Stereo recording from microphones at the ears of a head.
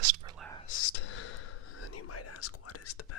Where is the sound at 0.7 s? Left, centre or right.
Left.